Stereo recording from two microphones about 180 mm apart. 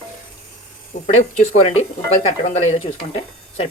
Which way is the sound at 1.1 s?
40° left (ahead or behind).